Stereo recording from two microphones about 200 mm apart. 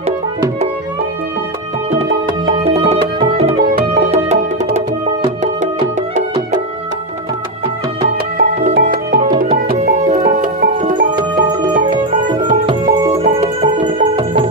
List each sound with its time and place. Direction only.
2.5 s music: 30° right (ahead or behind)
8.4 s music: 40° right (ahead or behind)
8.7 s music: 55° right (ahead or behind); by 12.4 s 40° right (ahead or behind)
12.6 s music: 25° right (ahead or behind)